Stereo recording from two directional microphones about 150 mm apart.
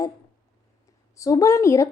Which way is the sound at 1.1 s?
20° left (ahead or behind).